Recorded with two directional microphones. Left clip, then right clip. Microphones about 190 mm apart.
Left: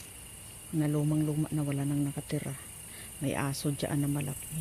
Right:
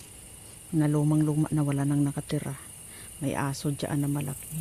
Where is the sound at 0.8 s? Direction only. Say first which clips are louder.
Right 5 dB; 20° right (ahead or behind).